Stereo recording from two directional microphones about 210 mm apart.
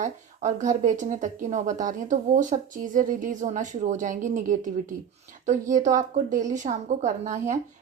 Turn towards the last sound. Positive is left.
turn(degrees=-35)  # may be behind; listen again after turning